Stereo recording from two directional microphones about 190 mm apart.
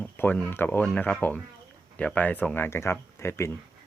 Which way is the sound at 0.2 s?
10° left (ahead or behind).